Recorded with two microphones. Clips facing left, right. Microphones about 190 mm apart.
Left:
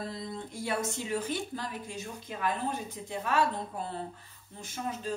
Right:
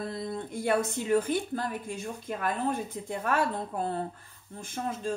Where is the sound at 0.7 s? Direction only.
55° right (ahead or behind).